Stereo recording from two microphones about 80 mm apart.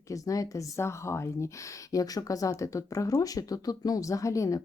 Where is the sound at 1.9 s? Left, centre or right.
Left.